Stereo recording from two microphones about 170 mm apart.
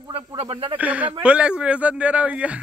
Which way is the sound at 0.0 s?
25° right (ahead or behind).